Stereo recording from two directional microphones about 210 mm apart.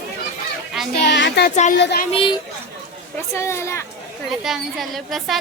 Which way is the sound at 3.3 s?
15° left (ahead or behind).